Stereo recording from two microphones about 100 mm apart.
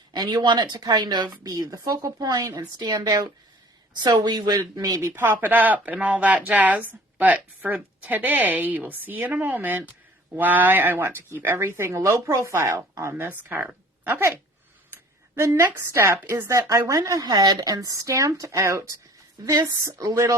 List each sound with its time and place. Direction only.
0.1 s a woman's voice: 45° right (ahead or behind); by 14.3 s 25° right (ahead or behind)
15.4 s speech: 25° right (ahead or behind)